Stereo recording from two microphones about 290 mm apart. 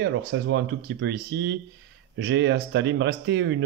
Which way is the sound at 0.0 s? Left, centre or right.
Right.